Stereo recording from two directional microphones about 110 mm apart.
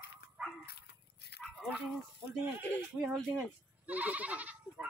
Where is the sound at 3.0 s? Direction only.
Centre (ahead or behind).